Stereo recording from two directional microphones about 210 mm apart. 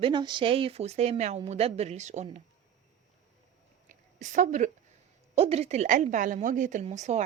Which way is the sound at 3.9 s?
35° right (ahead or behind).